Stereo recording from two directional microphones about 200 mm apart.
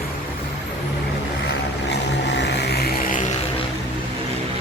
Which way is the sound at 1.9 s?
60° left (ahead or behind).